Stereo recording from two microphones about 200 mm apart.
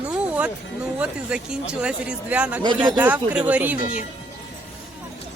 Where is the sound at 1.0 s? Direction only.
5° right (ahead or behind).